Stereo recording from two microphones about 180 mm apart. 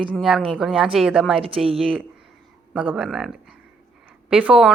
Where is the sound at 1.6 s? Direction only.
5° right (ahead or behind).